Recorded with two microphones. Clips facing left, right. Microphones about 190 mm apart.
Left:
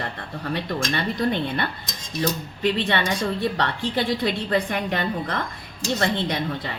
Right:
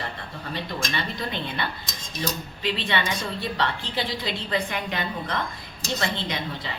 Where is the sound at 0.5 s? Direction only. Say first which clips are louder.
Left 4 dB; 55° left (ahead or behind).